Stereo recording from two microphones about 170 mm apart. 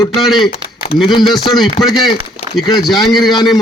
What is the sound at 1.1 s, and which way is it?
Speech, 25° left (ahead or behind).